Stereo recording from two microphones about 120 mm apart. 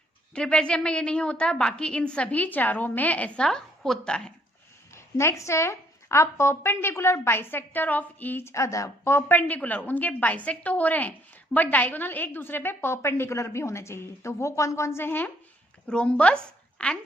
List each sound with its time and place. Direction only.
0.3 s a woman's voice: 10° left (ahead or behind)
4.9 s a woman's voice: 25° left (ahead or behind)